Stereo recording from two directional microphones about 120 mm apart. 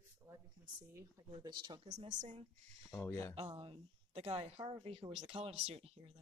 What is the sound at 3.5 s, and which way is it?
A woman's voice, 50° right (ahead or behind).